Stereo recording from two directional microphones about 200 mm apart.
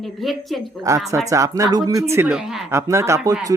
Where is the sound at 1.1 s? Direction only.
15° right (ahead or behind).